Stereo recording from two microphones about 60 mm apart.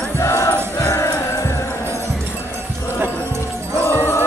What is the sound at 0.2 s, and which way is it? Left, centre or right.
Music, left.